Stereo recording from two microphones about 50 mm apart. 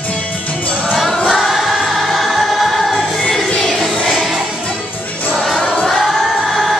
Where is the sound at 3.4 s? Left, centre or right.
Centre.